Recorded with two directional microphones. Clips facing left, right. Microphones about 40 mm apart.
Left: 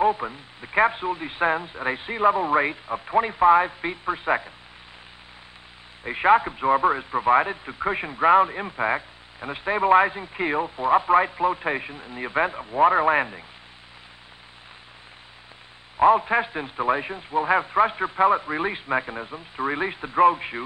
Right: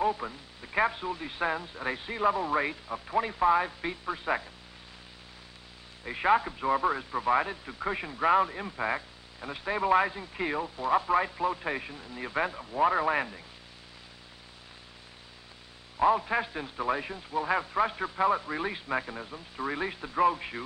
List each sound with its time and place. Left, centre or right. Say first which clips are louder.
0.0 s speech: left 7 dB; left
6.0 s speech: left 7 dB; left
16.0 s speech: left 7 dB; left